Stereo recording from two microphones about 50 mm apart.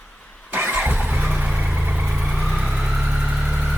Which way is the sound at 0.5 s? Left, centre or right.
Right.